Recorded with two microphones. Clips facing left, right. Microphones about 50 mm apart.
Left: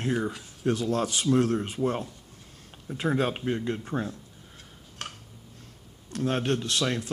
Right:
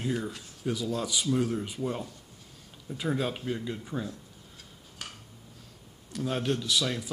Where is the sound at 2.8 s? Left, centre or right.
Left.